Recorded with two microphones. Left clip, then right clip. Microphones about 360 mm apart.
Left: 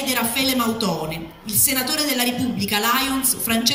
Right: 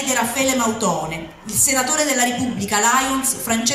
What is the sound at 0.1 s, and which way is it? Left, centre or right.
A woman's voice, centre.